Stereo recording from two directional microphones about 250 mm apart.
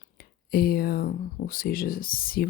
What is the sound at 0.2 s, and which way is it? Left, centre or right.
Speech, left.